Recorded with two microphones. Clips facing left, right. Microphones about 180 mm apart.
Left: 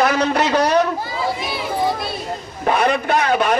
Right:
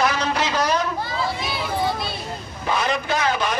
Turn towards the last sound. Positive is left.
turn(degrees=60)  # may be behind; listen again after turning